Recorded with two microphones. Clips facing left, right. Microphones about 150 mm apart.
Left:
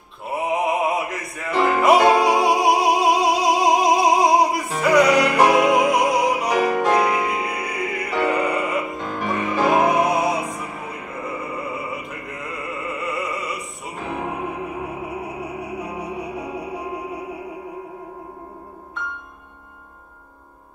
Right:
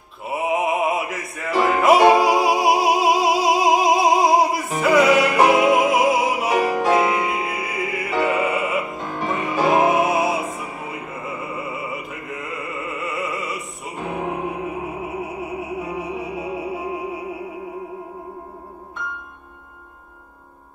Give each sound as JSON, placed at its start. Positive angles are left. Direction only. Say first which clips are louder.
{"t": 0.3, "sound": "music", "louder": "even", "side_deg": 0}
{"t": 9.0, "sound": "music", "louder": "even", "side_deg": -25}
{"t": 9.3, "sound": "music", "louder": "even", "side_deg": 0}